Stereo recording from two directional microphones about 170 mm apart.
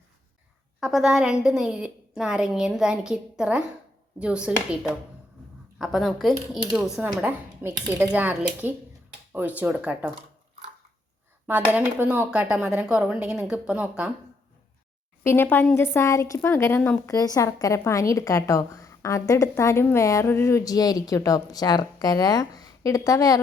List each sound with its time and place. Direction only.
0.8 s a woman's voice: centre (ahead or behind)
11.7 s speech: 10° right (ahead or behind)
15.2 s a woman's voice: 15° left (ahead or behind)